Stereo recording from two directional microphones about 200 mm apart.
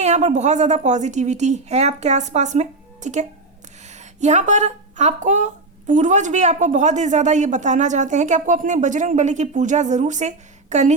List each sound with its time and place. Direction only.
0.0 s a woman's voice: 35° right (ahead or behind)